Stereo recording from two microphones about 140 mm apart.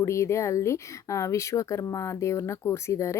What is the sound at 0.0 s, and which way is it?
Speech, 20° left (ahead or behind).